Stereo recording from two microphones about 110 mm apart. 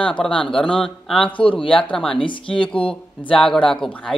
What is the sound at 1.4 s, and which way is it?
Speech, 50° left (ahead or behind).